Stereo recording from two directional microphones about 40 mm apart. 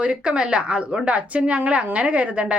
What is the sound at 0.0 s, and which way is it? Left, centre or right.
Speech, right.